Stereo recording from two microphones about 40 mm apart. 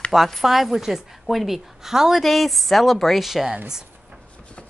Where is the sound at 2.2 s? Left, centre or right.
Centre.